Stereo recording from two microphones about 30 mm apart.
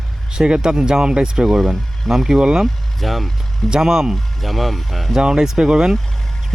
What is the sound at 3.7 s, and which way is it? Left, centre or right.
Speech, right.